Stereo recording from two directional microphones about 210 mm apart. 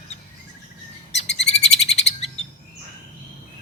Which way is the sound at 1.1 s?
30° left (ahead or behind).